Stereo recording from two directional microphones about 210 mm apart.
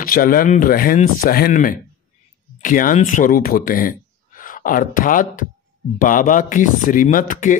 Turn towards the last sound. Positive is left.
turn(degrees=40)  # may be behind; listen again after turning